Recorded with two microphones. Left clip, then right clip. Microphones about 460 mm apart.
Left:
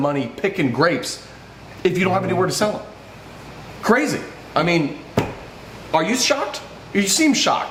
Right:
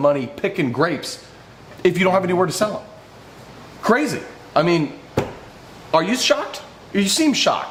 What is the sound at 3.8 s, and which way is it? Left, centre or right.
Speech, right.